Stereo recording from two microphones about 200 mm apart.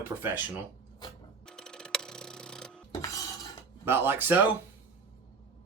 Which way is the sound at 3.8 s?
10° right (ahead or behind).